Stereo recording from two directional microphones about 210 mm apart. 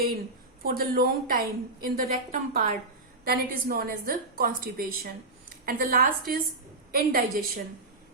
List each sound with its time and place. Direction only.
0.6 s a woman's voice: 45° right (ahead or behind)